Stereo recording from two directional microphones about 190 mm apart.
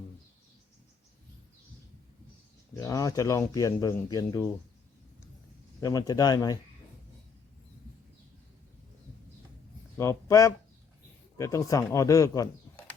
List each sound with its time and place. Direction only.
2.7 s speech: 15° left (ahead or behind)
5.8 s speech: 20° left (ahead or behind)
10.0 s speech: 15° left (ahead or behind)